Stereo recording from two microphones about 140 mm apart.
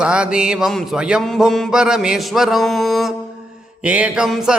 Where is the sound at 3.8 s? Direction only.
10° right (ahead or behind).